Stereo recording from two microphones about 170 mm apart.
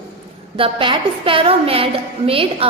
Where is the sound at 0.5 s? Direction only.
30° right (ahead or behind).